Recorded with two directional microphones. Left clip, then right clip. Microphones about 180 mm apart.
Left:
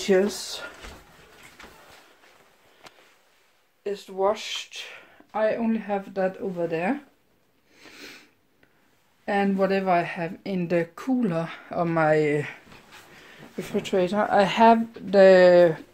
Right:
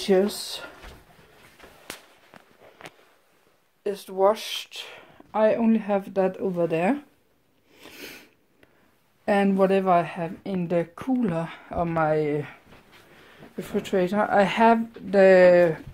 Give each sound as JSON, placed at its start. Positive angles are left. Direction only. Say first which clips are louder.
{"t": 0.0, "sound": "speech", "louder": "even", "side_deg": -10}
{"t": 3.8, "sound": "speech", "louder": "right 3 dB", "side_deg": -50}
{"t": 7.7, "sound": "a sound", "louder": "right 2 dB", "side_deg": -50}
{"t": 9.2, "sound": "speech", "louder": "right 2 dB", "side_deg": -55}
{"t": 9.7, "sound": "speech", "louder": "right 2 dB", "side_deg": -30}
{"t": 13.6, "sound": "speech", "louder": "left 1 dB", "side_deg": -5}